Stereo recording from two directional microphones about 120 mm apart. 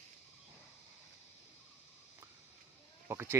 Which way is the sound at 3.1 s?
20° right (ahead or behind).